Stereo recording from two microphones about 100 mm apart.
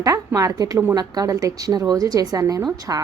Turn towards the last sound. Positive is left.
turn(degrees=-35)  # may be behind; listen again after turning